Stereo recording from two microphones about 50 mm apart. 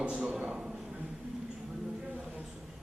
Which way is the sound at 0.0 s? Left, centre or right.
Right.